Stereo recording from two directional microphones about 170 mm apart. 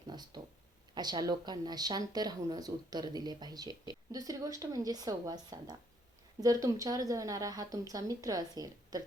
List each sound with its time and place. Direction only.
0.1 s speech: 25° right (ahead or behind)